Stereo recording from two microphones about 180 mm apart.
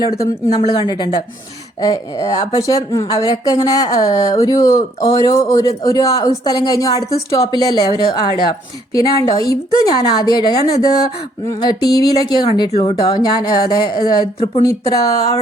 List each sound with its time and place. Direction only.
0.0 s a woman's voice: 20° left (ahead or behind)